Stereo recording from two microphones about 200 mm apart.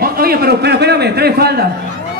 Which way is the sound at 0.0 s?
50° right (ahead or behind).